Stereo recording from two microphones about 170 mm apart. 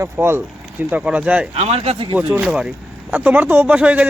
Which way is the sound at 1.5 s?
35° right (ahead or behind).